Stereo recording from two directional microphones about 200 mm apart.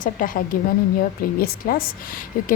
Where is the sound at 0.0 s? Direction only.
40° left (ahead or behind).